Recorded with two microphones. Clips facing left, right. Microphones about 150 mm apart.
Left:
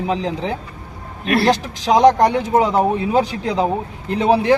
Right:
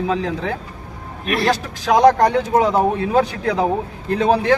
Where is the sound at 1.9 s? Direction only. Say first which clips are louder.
Even; 15° left (ahead or behind).